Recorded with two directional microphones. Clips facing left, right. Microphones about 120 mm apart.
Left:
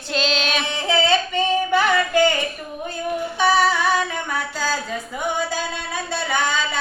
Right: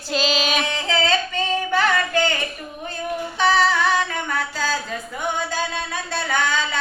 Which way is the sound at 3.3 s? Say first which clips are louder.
Even; 10° left (ahead or behind).